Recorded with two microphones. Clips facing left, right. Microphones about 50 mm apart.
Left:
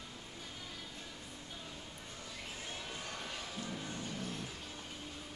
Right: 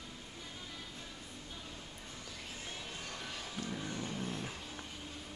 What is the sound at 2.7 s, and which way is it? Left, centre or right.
Music, centre.